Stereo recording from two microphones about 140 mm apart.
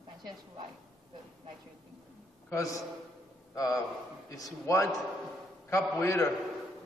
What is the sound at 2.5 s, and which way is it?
A man's voice, 25° left (ahead or behind).